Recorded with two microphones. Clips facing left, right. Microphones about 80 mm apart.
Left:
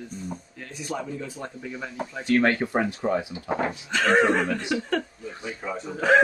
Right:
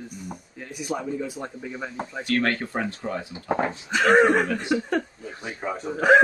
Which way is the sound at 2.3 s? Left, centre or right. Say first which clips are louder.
Left 4 dB; centre.